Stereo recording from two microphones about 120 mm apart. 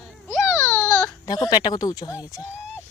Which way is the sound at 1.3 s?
35° left (ahead or behind).